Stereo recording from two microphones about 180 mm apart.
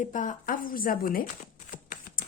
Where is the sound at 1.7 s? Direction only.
50° left (ahead or behind).